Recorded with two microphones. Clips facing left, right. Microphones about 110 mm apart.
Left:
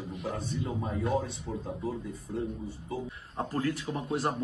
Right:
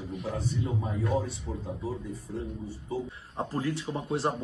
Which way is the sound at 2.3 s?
10° left (ahead or behind).